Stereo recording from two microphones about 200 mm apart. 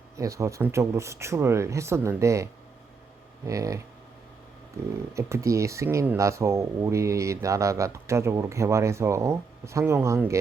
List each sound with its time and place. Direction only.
0.2 s speech: 15° right (ahead or behind)
5.1 s speech: 15° right (ahead or behind)